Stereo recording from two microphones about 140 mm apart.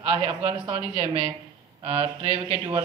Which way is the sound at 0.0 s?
45° right (ahead or behind).